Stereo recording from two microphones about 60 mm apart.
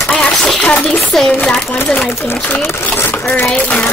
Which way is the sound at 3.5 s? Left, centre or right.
Left.